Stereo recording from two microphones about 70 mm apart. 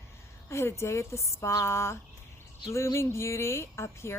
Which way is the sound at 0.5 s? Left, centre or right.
Left.